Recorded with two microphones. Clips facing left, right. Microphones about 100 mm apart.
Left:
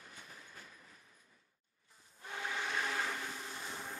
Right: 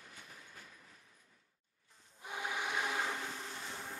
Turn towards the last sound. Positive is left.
turn(degrees=15)  # may be behind; listen again after turning